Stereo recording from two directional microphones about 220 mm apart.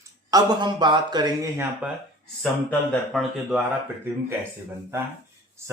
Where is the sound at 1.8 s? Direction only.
5° right (ahead or behind).